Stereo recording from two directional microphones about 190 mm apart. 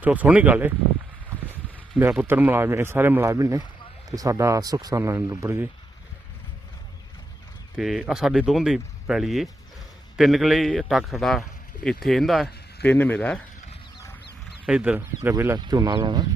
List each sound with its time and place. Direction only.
0.0 s speech: 10° right (ahead or behind)
2.0 s speech: 10° right (ahead or behind)
7.8 s a man's voice: 5° right (ahead or behind)
14.7 s speech: 5° right (ahead or behind); by 16.2 s 25° right (ahead or behind)